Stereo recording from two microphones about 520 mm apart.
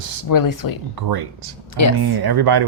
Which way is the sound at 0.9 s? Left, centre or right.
Right.